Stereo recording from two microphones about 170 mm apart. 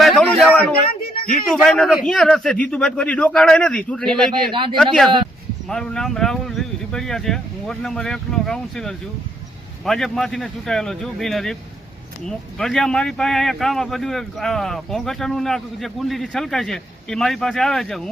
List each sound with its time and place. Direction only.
0.0 s a sound: centre (ahead or behind)
1.1 s a man's voice: 60° left (ahead or behind)
1.5 s speech: centre (ahead or behind)
12.5 s speech: 5° left (ahead or behind)